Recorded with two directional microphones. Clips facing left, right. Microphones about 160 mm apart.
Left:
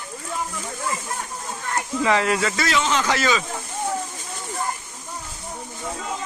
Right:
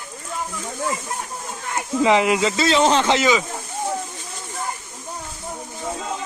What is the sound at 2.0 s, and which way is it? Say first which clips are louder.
Speech: right 4 dB; 20° right (ahead or behind).